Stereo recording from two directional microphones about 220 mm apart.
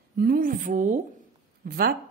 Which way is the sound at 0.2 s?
40° right (ahead or behind).